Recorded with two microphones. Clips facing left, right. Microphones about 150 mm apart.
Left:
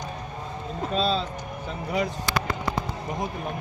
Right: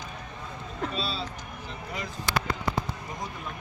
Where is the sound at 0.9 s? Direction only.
45° left (ahead or behind).